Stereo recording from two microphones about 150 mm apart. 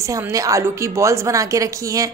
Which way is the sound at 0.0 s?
20° right (ahead or behind).